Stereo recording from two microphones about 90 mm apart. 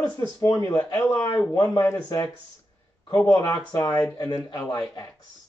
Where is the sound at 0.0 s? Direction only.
45° left (ahead or behind).